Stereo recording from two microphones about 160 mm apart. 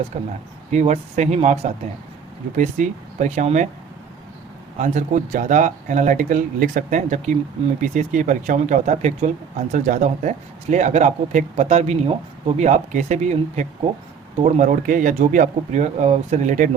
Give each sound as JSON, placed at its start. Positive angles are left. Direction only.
{"t": 0.7, "sound": "speech", "side_deg": -45}
{"t": 4.8, "sound": "speech", "side_deg": -50}